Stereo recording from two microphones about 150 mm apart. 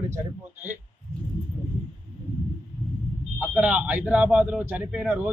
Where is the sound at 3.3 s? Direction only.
5° right (ahead or behind).